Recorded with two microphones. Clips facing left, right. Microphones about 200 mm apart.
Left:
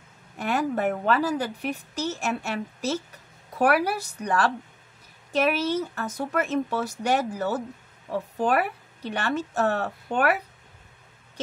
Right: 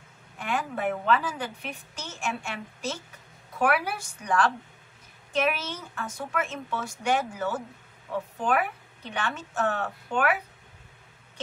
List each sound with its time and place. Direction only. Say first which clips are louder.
0.4 s a woman's voice: left 5 dB; 40° left (ahead or behind)